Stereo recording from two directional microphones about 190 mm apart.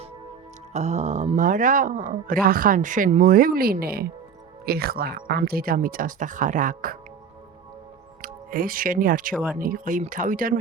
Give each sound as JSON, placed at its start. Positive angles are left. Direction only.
{"t": 0.7, "sound": "speech", "side_deg": -35}
{"t": 8.2, "sound": "speech", "side_deg": -50}